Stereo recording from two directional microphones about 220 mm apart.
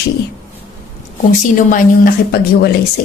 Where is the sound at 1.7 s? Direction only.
45° left (ahead or behind).